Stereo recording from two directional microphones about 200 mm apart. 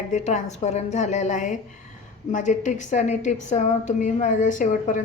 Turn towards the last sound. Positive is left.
turn(degrees=40)  # may be behind; listen again after turning